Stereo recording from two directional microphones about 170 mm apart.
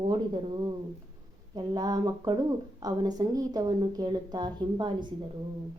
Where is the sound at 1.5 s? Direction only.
25° right (ahead or behind).